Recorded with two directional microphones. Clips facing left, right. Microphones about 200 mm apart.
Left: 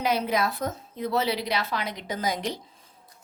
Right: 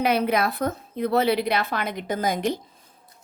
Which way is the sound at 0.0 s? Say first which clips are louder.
Right 4 dB; 60° right (ahead or behind).